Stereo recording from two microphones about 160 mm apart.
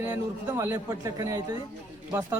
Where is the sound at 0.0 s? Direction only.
15° right (ahead or behind).